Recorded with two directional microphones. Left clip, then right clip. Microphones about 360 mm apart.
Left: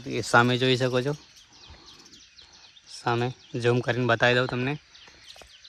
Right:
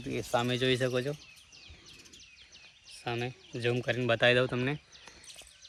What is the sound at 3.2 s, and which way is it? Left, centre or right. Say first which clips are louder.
Speech: left 7 dB; left.